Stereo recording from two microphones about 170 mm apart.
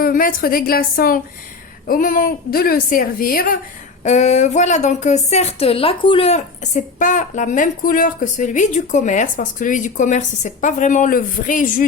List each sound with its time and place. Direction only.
0.0 s a woman's voice: 55° left (ahead or behind)
4.0 s a woman's voice: 45° left (ahead or behind)